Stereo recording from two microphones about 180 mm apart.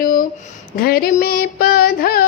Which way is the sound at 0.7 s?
55° left (ahead or behind).